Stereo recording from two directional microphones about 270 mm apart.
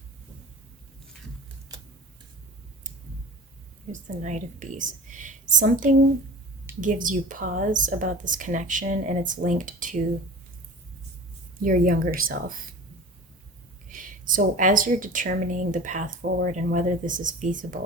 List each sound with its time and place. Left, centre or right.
3.9 s a woman's voice: right
11.6 s a woman's voice: right
13.8 s a woman's voice: right